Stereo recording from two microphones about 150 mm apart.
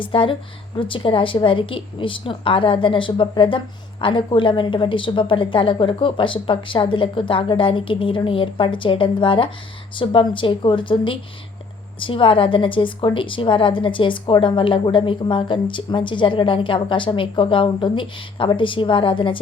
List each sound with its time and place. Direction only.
0.0 s a woman's voice: 35° left (ahead or behind)